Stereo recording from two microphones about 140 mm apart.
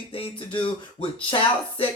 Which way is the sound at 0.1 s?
40° left (ahead or behind).